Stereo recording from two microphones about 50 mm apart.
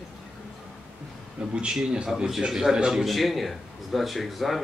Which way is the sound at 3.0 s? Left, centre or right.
Centre.